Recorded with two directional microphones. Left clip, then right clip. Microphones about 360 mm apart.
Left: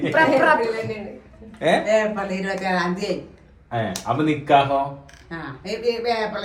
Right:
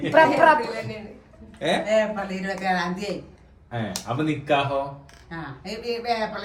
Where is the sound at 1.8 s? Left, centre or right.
Centre.